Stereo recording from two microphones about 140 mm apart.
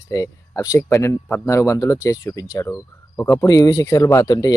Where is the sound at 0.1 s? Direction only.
25° left (ahead or behind).